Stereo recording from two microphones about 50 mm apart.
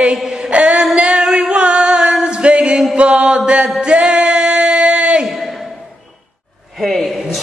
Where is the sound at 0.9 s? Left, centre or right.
Centre.